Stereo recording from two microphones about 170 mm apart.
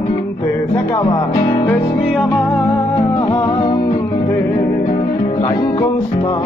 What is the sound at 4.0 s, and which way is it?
Music, 15° left (ahead or behind).